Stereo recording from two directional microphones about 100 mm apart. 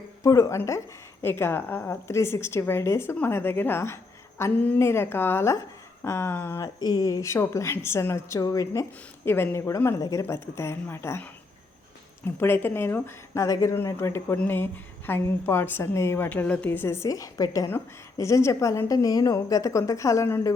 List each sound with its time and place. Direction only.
0.2 s a woman's voice: 35° left (ahead or behind)
6.6 s a woman's voice: 40° left (ahead or behind)
9.2 s a woman's voice: 20° left (ahead or behind)
12.4 s a woman's voice: 25° left (ahead or behind)